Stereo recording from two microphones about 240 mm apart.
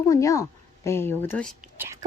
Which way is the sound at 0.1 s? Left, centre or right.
Centre.